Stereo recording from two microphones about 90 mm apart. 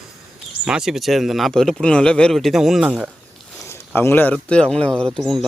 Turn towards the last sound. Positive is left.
turn(degrees=5)  # may be behind; listen again after turning